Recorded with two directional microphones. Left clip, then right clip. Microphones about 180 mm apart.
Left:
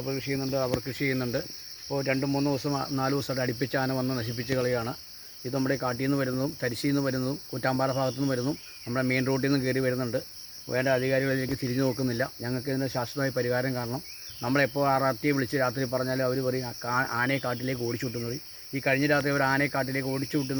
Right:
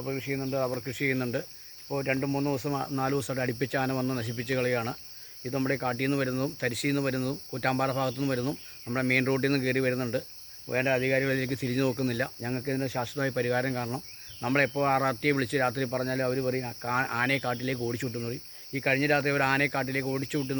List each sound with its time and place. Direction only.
0.0 s speech: 10° right (ahead or behind)
0.9 s speech: 20° right (ahead or behind)